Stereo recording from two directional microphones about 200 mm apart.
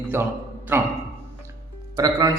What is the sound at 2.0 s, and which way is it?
Speech, 15° right (ahead or behind).